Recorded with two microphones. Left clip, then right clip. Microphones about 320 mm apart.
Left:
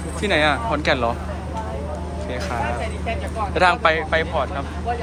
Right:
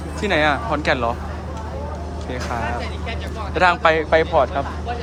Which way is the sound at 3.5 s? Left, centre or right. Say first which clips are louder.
Right 2 dB; centre.